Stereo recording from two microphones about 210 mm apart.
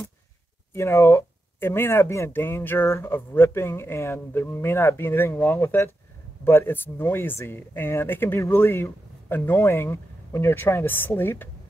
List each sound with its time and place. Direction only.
0.7 s speech: 15° left (ahead or behind)